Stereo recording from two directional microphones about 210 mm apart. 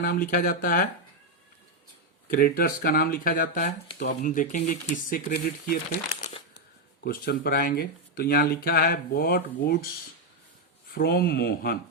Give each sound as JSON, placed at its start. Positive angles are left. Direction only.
{"t": 0.0, "sound": "speech", "side_deg": 45}
{"t": 2.3, "sound": "speech", "side_deg": 45}
{"t": 7.0, "sound": "speech", "side_deg": 45}